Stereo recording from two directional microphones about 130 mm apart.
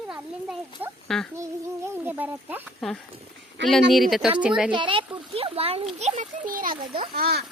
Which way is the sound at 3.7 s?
Centre (ahead or behind).